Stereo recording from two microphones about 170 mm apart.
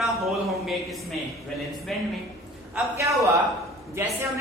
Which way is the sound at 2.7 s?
15° right (ahead or behind).